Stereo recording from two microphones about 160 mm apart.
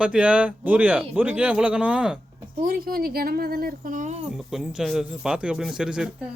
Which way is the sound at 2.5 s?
65° right (ahead or behind).